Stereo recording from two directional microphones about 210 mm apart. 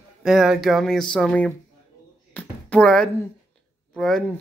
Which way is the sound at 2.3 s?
5° left (ahead or behind).